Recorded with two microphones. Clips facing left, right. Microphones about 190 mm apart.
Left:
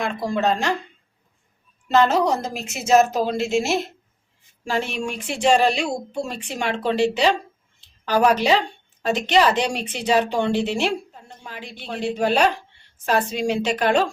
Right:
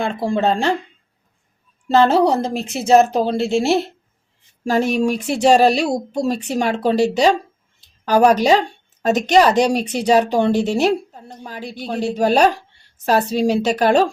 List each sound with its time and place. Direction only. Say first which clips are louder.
0.0 s speech: right 4 dB; 30° right (ahead or behind)
1.9 s speech: right 4 dB; 30° right (ahead or behind)